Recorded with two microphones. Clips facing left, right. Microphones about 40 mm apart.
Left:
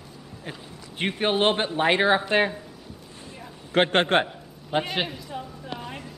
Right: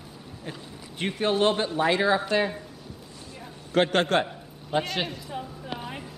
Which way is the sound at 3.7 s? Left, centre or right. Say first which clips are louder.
Left 2 dB; left.